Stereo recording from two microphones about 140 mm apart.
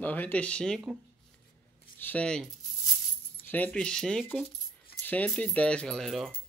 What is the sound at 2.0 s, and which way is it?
Rattle, 10° left (ahead or behind).